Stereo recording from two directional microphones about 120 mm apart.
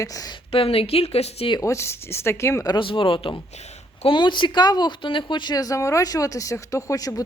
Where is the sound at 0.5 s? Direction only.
50° left (ahead or behind).